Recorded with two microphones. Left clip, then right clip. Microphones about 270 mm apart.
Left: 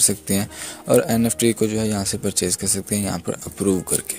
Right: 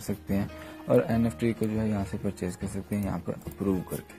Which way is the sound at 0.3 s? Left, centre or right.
Left.